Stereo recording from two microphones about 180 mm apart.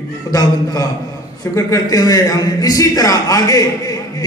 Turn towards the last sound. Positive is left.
turn(degrees=20)  # may be behind; listen again after turning